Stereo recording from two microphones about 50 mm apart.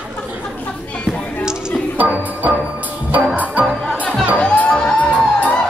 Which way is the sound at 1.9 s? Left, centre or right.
Right.